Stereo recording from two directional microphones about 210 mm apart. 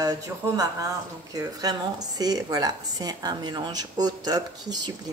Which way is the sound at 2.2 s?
20° right (ahead or behind).